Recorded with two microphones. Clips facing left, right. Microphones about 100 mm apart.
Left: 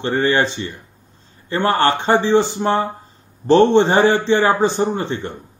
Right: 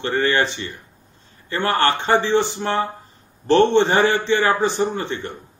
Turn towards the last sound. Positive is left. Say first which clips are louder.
# left 3 dB
turn(degrees=25)  # may be behind; listen again after turning